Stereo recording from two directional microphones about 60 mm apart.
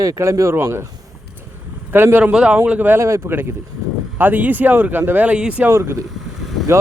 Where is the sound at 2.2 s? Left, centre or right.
Centre.